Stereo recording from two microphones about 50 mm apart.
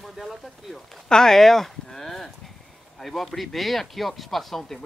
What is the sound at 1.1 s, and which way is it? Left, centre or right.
Speech, centre.